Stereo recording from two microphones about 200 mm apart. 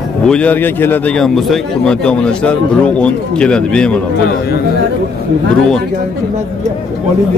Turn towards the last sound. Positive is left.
turn(degrees=5)  # may be behind; listen again after turning